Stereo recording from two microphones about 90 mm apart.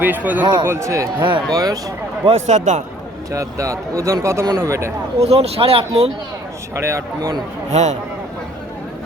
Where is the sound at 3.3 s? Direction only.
40° right (ahead or behind).